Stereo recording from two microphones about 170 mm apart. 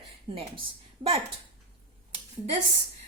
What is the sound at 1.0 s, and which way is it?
Speech, 55° right (ahead or behind).